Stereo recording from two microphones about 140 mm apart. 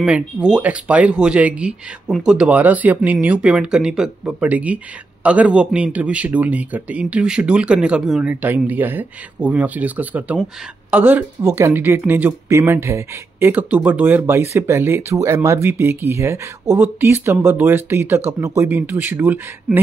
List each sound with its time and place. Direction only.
0.0 s speech: 5° right (ahead or behind)